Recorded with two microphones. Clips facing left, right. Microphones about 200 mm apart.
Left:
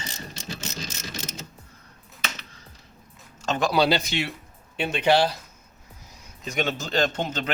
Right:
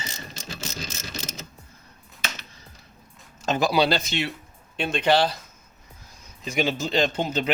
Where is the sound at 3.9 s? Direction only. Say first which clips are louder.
Left 1 dB; 15° left (ahead or behind).